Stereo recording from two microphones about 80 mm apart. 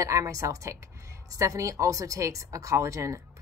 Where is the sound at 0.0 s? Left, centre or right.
Right.